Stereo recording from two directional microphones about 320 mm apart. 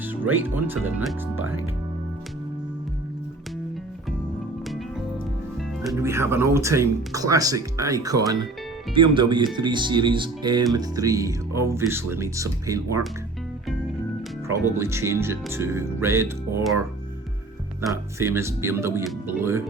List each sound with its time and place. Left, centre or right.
0.0 s speech: centre
1.4 s speech: right
4.6 s music: centre
5.5 s speech: centre
14.4 s speech: centre